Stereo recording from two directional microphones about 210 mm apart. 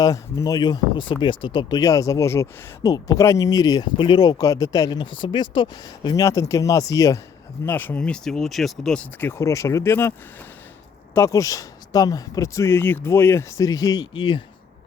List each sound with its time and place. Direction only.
0.0 s speech: 15° left (ahead or behind)